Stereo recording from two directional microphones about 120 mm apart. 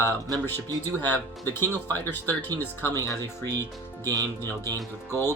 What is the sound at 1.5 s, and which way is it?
Speech, 20° left (ahead or behind).